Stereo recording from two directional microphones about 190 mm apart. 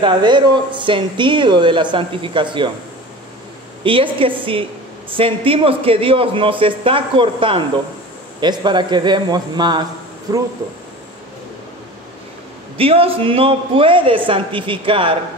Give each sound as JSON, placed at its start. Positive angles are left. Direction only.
{"t": 0.0, "sound": "speech", "side_deg": -25}
{"t": 3.8, "sound": "speech", "side_deg": -25}
{"t": 12.7, "sound": "speech", "side_deg": -30}